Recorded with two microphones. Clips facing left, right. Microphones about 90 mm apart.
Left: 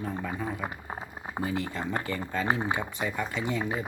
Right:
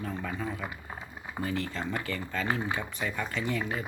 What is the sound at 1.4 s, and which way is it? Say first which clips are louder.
Speech: left 1 dB; 15° left (ahead or behind).